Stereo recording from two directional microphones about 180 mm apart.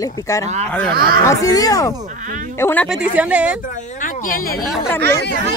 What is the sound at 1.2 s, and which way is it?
Speech, 20° left (ahead or behind).